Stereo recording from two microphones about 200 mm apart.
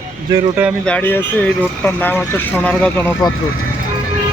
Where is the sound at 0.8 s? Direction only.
5° left (ahead or behind).